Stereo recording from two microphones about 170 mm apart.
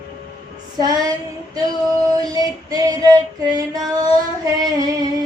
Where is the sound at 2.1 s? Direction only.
20° right (ahead or behind).